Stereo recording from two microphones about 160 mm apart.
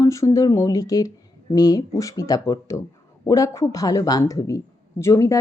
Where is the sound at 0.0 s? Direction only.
20° left (ahead or behind).